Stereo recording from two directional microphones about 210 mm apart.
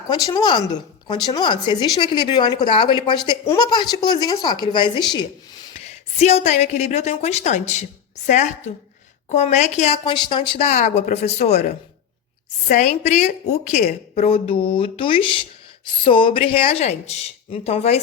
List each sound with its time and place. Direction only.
0.1 s a woman's voice: 20° left (ahead or behind)
5.7 s a woman's voice: 30° left (ahead or behind)